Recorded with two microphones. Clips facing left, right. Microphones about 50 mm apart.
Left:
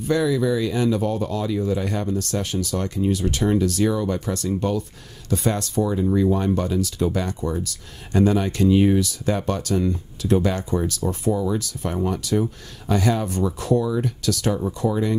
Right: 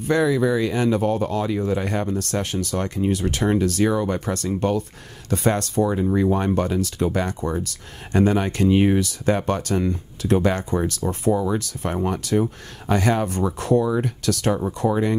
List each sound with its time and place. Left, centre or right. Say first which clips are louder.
0.1 s speech: right 1 dB; right